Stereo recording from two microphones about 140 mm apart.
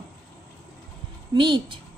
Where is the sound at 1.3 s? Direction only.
35° right (ahead or behind).